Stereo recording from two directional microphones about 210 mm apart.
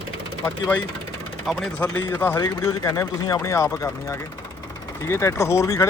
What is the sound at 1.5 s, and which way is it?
Speech, 5° left (ahead or behind).